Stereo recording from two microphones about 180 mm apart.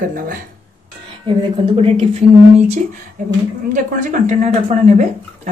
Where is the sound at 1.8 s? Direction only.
30° right (ahead or behind).